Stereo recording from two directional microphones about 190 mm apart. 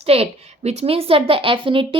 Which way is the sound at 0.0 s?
30° right (ahead or behind).